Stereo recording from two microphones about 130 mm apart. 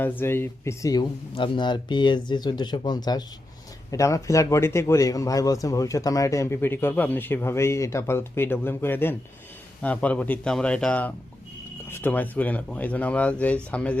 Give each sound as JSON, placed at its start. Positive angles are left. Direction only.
{"t": 0.0, "sound": "a man's voice", "side_deg": 15}
{"t": 1.4, "sound": "a man's voice", "side_deg": 35}